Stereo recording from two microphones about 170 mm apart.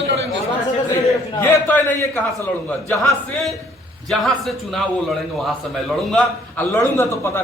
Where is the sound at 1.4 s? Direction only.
15° left (ahead or behind).